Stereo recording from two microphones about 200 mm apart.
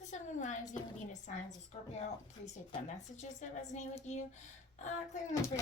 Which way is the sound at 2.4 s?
35° left (ahead or behind).